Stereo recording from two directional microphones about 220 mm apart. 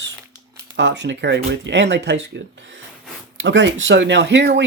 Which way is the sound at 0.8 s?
55° right (ahead or behind).